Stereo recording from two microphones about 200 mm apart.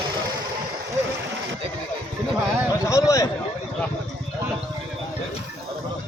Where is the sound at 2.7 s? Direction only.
15° left (ahead or behind).